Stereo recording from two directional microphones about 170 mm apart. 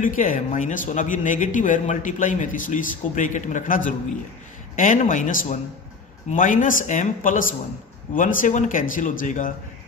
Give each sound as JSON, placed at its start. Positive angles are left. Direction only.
{"t": 0.0, "sound": "speech", "side_deg": 50}